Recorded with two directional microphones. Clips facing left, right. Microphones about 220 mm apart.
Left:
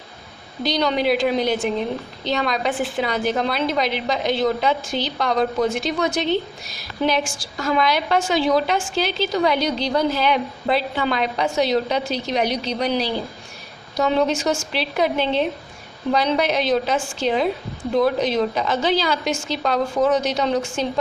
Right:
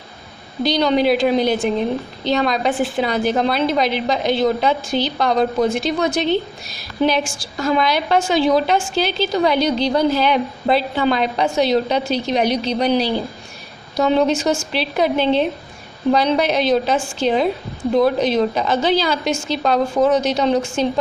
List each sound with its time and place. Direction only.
0.6 s a woman's voice: 30° right (ahead or behind)